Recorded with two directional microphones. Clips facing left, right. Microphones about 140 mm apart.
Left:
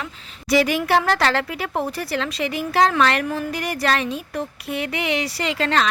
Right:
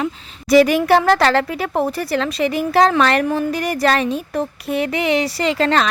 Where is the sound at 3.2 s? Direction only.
30° right (ahead or behind).